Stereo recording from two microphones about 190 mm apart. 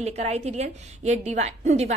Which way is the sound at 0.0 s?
35° right (ahead or behind).